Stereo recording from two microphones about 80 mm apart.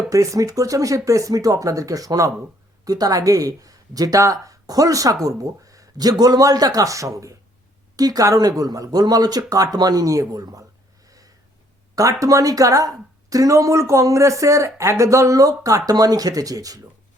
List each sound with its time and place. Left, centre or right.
0.1 s speech: right
11.0 s sniff: right
11.9 s speech: right